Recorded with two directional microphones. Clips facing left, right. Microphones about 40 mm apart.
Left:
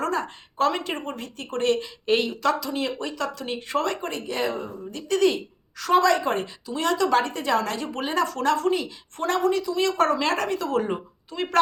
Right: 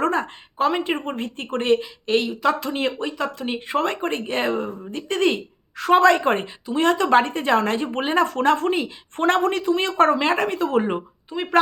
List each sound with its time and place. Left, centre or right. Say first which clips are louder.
0.0 s speech: right 4 dB; right
1.8 s speech: right 1 dB; centre
2.6 s speech: right 4 dB; right
3.0 s speech: right 3 dB; right